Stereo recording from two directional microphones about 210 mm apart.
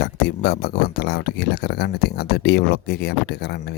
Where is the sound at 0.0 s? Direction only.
50° left (ahead or behind).